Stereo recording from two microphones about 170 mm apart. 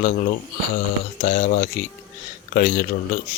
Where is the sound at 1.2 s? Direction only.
50° left (ahead or behind).